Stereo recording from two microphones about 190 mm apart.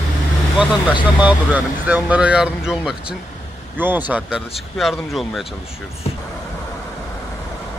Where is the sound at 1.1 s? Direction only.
10° right (ahead or behind).